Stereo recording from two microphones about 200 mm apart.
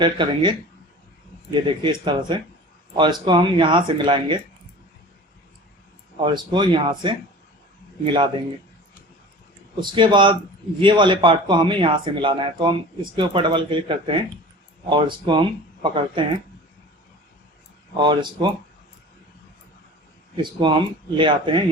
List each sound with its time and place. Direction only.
0.0 s speech: 25° right (ahead or behind)
6.2 s speech: 25° right (ahead or behind)
9.8 s speech: 25° right (ahead or behind)
17.9 s speech: 25° right (ahead or behind)
20.3 s speech: 25° right (ahead or behind)